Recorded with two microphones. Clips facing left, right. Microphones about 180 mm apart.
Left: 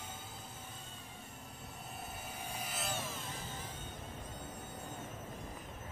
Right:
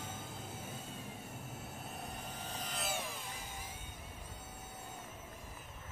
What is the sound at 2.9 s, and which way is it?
Vehicle, 10° right (ahead or behind).